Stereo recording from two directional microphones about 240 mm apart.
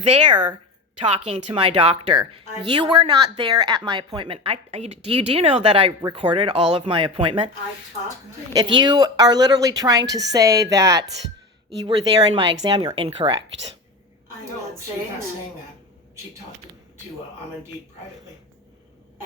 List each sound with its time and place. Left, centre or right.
0.0 s speech: centre
1.5 s speech: right
8.7 s speech: centre